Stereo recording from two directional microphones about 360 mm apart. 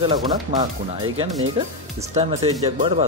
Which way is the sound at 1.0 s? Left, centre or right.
Right.